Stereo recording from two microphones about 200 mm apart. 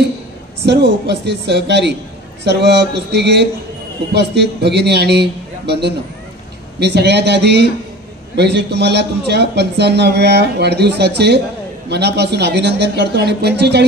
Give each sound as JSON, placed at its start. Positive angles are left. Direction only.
{"t": 0.7, "sound": "a man's voice", "side_deg": -55}